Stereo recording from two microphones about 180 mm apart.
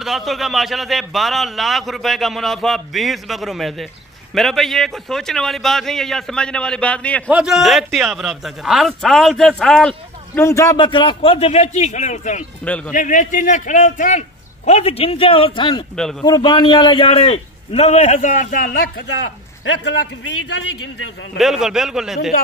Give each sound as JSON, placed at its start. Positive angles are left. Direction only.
{"t": 0.0, "sound": "a man's voice", "side_deg": 0}
{"t": 7.2, "sound": "a man's voice", "side_deg": -5}
{"t": 12.6, "sound": "a man's voice", "side_deg": 5}
{"t": 12.9, "sound": "a man's voice", "side_deg": 45}
{"t": 16.0, "sound": "a man's voice", "side_deg": 5}
{"t": 16.3, "sound": "a man's voice", "side_deg": 25}
{"t": 21.4, "sound": "a man's voice", "side_deg": 0}